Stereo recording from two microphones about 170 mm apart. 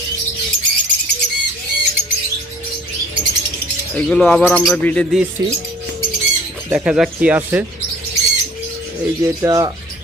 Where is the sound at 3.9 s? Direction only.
5° left (ahead or behind).